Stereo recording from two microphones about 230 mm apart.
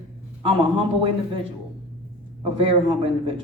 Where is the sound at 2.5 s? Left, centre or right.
Right.